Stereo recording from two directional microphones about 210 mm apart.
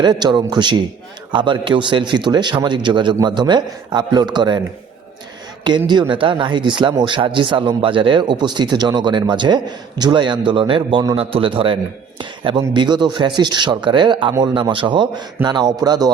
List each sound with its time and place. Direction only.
0.0 s speech: 20° right (ahead or behind)
5.6 s speech: 20° right (ahead or behind)